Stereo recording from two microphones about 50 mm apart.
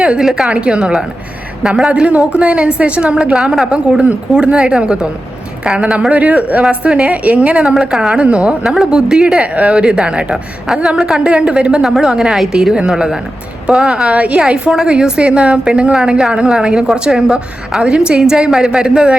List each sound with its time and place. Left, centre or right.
0.2 s a woman's voice: centre
0.5 s a woman's voice: right
1.9 s a woman's voice: right
7.8 s a woman's voice: centre
8.2 s a woman's voice: right
8.6 s a woman's voice: centre
10.7 s a woman's voice: centre
11.2 s a woman's voice: centre
14.1 s a woman's voice: right
14.3 s a woman's voice: centre